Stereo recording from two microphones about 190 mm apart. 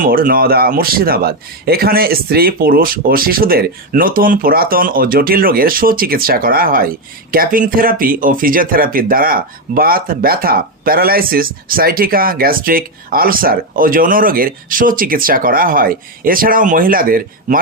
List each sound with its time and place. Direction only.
0.0 s speech: 50° right (ahead or behind)